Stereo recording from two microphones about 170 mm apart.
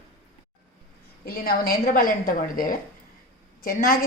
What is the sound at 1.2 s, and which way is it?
A woman's voice, 60° left (ahead or behind).